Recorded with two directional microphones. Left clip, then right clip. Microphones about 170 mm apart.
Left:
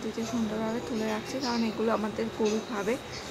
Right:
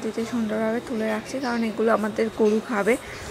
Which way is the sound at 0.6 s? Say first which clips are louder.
Right 6 dB; 25° right (ahead or behind).